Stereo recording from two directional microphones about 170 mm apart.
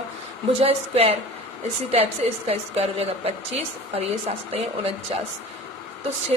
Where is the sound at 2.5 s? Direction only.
35° right (ahead or behind).